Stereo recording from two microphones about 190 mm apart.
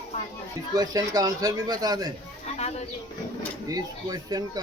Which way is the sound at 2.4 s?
35° left (ahead or behind).